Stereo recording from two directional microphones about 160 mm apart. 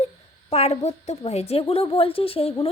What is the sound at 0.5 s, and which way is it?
A woman's voice, 40° left (ahead or behind).